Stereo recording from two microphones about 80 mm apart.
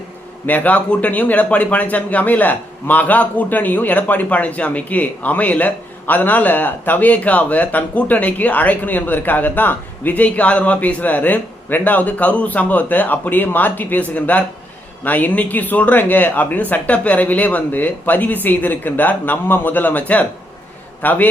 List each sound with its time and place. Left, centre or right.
0.4 s speech: left